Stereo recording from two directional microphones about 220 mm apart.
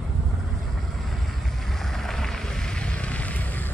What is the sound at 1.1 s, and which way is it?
Vehicle, centre (ahead or behind).